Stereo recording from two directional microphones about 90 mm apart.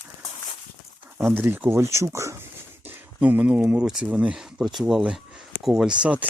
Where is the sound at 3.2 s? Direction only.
15° right (ahead or behind).